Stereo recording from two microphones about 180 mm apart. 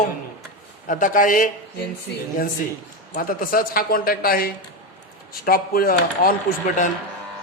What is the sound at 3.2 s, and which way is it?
Speech, 50° left (ahead or behind).